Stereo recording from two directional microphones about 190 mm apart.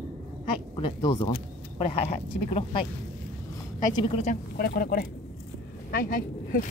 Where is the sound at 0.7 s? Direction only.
25° left (ahead or behind).